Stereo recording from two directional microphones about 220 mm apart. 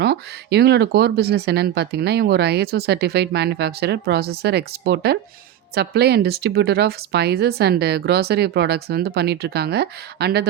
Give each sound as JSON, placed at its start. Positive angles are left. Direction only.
{"t": 0.0, "sound": "speech", "side_deg": -50}